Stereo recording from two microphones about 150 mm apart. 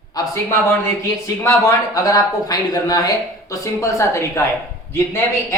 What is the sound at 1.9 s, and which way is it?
Speech, 25° left (ahead or behind).